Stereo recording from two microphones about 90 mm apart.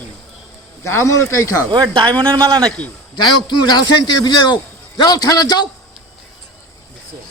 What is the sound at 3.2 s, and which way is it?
A man's voice, 55° left (ahead or behind).